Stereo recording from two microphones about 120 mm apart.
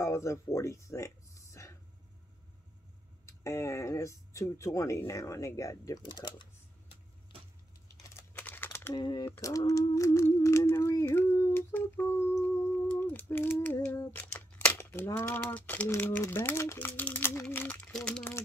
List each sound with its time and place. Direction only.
0.0 s speech: 25° left (ahead or behind)
3.3 s speech: 25° left (ahead or behind)
6.0 s speech: 40° left (ahead or behind)
8.3 s typing: 15° left (ahead or behind)
8.9 s speech: 40° left (ahead or behind)
9.3 s speech: 25° left (ahead or behind)
9.9 s humming: 25° left (ahead or behind)
15.9 s speech: 20° left (ahead or behind)